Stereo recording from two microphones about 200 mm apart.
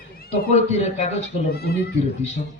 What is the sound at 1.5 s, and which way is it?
Speech, 50° left (ahead or behind).